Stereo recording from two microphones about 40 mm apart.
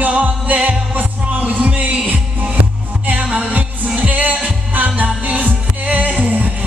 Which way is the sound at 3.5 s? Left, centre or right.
Right.